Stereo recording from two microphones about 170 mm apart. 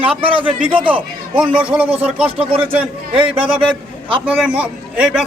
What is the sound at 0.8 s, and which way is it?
A man's voice, 5° right (ahead or behind).